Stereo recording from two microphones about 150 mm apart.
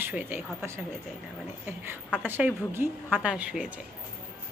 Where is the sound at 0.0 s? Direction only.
10° right (ahead or behind).